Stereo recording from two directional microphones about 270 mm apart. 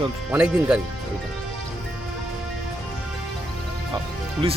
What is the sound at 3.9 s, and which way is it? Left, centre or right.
Music, centre.